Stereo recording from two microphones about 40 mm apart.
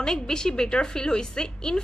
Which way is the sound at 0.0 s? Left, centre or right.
Centre.